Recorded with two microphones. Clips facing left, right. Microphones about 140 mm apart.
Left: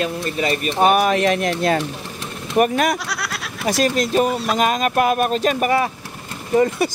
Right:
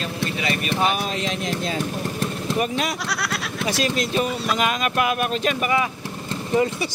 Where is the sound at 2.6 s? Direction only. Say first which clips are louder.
Left 9 dB; 55° left (ahead or behind).